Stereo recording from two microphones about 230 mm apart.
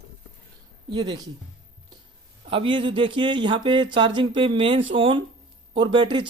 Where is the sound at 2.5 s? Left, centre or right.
Right.